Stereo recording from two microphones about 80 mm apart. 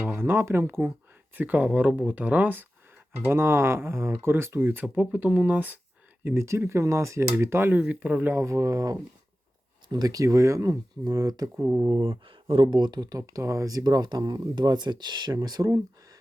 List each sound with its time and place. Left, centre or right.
0.1 s speech: right
6.2 s speech: right
8.3 s speech: right
11.5 s speech: right
11.9 s speech: right
12.7 s speech: right
14.5 s speech: right
15.4 s speech: right